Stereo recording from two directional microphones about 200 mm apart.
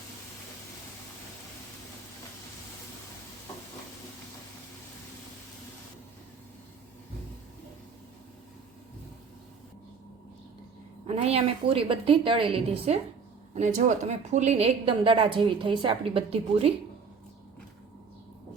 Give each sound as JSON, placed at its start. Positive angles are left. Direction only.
{"t": 11.0, "sound": "a woman's voice", "side_deg": -30}